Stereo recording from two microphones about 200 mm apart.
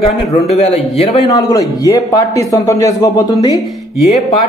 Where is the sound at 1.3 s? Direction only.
20° left (ahead or behind).